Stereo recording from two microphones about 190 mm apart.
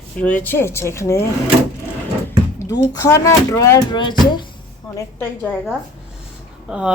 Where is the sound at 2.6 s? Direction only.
15° left (ahead or behind).